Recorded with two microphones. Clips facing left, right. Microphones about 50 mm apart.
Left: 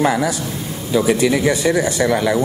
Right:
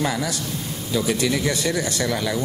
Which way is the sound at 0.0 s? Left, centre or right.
Centre.